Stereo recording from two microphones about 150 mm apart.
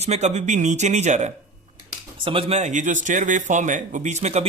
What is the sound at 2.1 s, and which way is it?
A man's voice, 35° right (ahead or behind).